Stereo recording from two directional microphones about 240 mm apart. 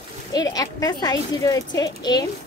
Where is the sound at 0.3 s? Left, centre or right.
Centre.